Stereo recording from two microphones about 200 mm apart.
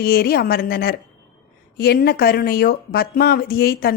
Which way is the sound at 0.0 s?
50° left (ahead or behind).